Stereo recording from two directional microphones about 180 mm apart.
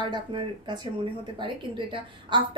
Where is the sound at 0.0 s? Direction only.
25° right (ahead or behind).